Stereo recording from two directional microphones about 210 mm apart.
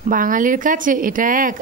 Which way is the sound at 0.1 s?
40° right (ahead or behind).